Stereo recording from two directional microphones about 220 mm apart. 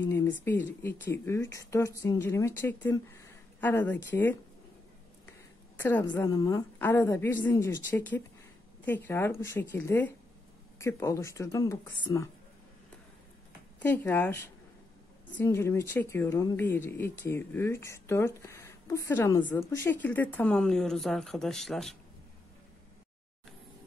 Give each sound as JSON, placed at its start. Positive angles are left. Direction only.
{"t": 0.0, "sound": "a sound", "side_deg": 10}
{"t": 0.5, "sound": "speech", "side_deg": 10}
{"t": 5.8, "sound": "a woman's voice", "side_deg": 10}
{"t": 13.8, "sound": "speech", "side_deg": 10}